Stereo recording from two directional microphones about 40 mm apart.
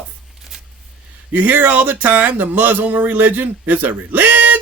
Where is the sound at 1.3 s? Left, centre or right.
Right.